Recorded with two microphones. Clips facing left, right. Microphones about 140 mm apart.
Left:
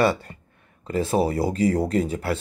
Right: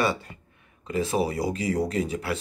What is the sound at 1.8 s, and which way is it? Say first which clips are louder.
Speech: left 3 dB; 30° left (ahead or behind).